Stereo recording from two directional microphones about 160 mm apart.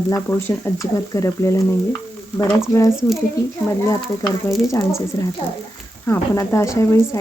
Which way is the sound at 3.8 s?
20° left (ahead or behind).